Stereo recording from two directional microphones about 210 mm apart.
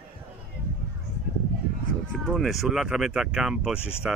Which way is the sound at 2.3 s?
Centre (ahead or behind).